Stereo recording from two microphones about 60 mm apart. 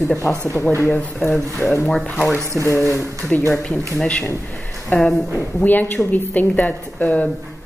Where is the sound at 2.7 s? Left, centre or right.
Left.